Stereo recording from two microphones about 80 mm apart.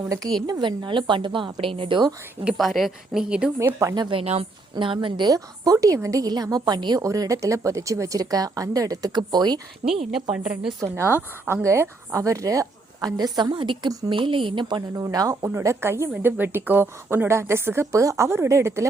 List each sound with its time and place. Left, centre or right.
0.4 s a woman's voice: right
2.6 s a woman's voice: centre
3.2 s a woman's voice: centre
3.9 s a woman's voice: right
4.7 s a woman's voice: right
5.3 s a woman's voice: right
7.0 s a woman's voice: right
9.8 s a woman's voice: centre
10.8 s a woman's voice: right
14.8 s a woman's voice: right
15.4 s a woman's voice: right